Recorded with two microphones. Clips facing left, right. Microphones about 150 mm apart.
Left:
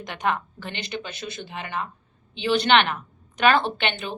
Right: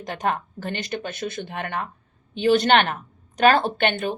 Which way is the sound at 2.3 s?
45° right (ahead or behind).